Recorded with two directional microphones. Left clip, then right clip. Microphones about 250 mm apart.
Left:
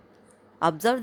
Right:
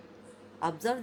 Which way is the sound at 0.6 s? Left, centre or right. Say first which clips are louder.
Left 8 dB; left.